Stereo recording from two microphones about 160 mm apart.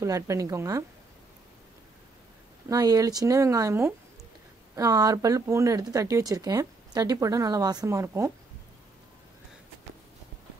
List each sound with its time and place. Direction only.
0.0 s speech: 20° right (ahead or behind)
2.7 s speech: 20° right (ahead or behind)